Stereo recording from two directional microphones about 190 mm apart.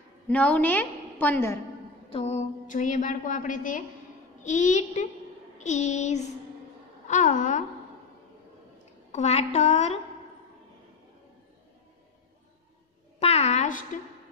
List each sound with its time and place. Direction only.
0.3 s a woman's voice: 5° left (ahead or behind)
2.0 s a woman's voice: 30° left (ahead or behind)
9.1 s a woman's voice: 35° left (ahead or behind)
13.2 s a sound: 35° left (ahead or behind)